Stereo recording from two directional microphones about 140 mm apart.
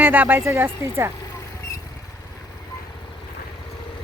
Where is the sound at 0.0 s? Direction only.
15° right (ahead or behind).